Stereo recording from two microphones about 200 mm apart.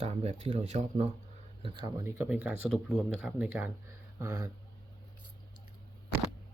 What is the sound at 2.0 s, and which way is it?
Speech, 10° right (ahead or behind).